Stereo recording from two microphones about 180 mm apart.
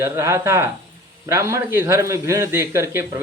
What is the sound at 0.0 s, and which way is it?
Speech, 15° right (ahead or behind).